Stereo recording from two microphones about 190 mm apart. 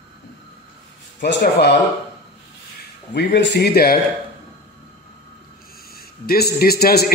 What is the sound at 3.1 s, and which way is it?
Speech, 65° left (ahead or behind).